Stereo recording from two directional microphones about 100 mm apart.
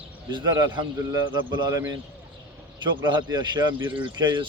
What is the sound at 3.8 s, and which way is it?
Speech, 15° right (ahead or behind).